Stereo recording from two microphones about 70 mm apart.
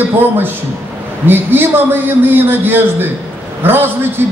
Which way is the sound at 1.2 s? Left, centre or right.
Right.